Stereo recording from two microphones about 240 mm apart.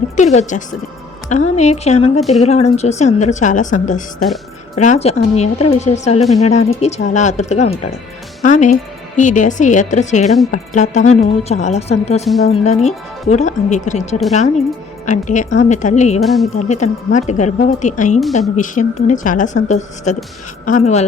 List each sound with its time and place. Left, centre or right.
0.2 s speech: left
16.2 s speech: centre
16.6 s speech: left